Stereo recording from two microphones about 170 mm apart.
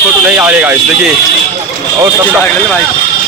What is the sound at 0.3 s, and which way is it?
Speech, 10° right (ahead or behind).